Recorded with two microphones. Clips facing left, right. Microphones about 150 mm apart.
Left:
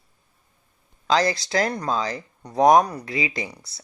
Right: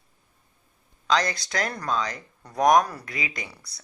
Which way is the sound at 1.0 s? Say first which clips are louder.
Left 4 dB; 30° left (ahead or behind).